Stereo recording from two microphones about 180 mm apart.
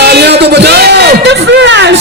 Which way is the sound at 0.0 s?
65° right (ahead or behind).